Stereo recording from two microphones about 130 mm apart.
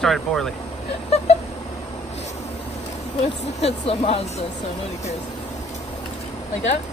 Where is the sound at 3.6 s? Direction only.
50° left (ahead or behind).